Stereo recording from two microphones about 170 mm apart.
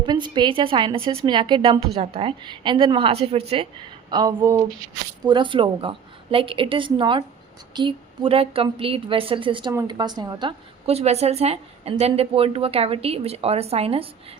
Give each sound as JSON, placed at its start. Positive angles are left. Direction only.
{"t": 0.0, "sound": "a woman's voice", "side_deg": -25}
{"t": 4.1, "sound": "a woman's voice", "side_deg": -25}